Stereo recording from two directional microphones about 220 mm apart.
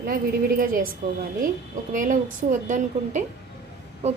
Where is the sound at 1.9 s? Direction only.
35° right (ahead or behind).